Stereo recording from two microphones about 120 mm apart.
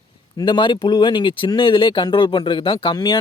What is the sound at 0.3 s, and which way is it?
Speech, 40° left (ahead or behind).